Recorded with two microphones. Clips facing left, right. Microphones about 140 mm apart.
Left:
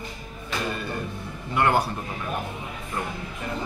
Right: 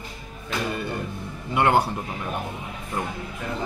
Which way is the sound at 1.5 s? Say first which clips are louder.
Right 2 dB; 20° right (ahead or behind).